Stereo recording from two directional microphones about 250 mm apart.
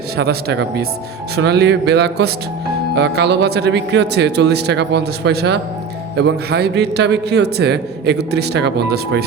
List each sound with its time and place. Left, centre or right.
0.2 s a man's voice: right